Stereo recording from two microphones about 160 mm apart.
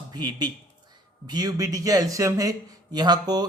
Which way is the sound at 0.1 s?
25° right (ahead or behind).